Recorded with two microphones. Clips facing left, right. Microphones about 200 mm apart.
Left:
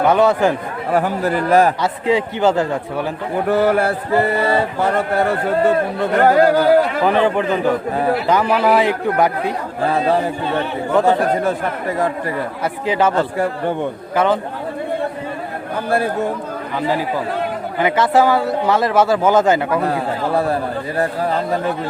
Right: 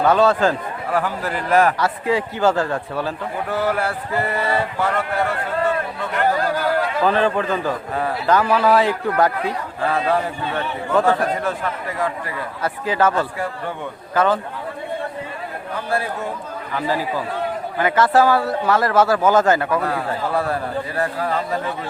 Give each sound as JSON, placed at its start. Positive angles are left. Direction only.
{"t": 0.0, "sound": "speech", "side_deg": 15}
{"t": 0.9, "sound": "a man's voice", "side_deg": 45}
{"t": 1.8, "sound": "speech", "side_deg": 20}
{"t": 3.5, "sound": "a man's voice", "side_deg": 55}
{"t": 4.2, "sound": "speech", "side_deg": 35}
{"t": 6.2, "sound": "speech", "side_deg": 75}
{"t": 7.0, "sound": "speech", "side_deg": 15}
{"t": 9.8, "sound": "speech", "side_deg": 35}
{"t": 10.9, "sound": "speech", "side_deg": 20}
{"t": 12.6, "sound": "speech", "side_deg": 20}
{"t": 16.7, "sound": "speech", "side_deg": 20}